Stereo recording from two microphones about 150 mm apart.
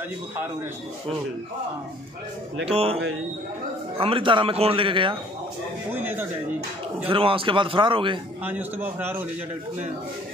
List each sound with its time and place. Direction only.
2.6 s speech: 40° right (ahead or behind)
4.0 s speech: 35° right (ahead or behind)
5.9 s speech: 15° right (ahead or behind)
7.1 s speech: 35° right (ahead or behind)
8.5 s speech: 10° right (ahead or behind)